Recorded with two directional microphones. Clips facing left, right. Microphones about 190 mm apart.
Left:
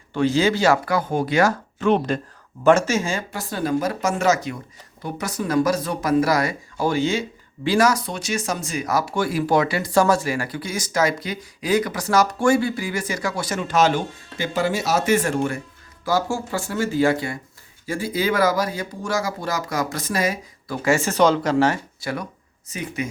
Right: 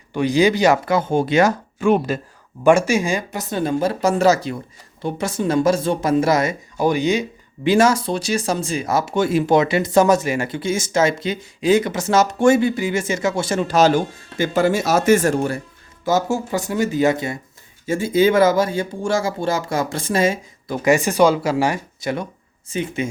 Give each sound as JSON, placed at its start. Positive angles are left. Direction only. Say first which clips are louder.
{"t": 0.1, "sound": "speech", "louder": "right 3 dB", "side_deg": -15}
{"t": 1.8, "sound": "speech", "louder": "right 2 dB", "side_deg": -5}
{"t": 16.0, "sound": "speech", "louder": "right 3 dB", "side_deg": -20}